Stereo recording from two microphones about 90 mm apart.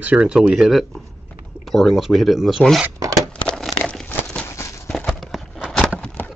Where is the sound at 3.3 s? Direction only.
10° left (ahead or behind).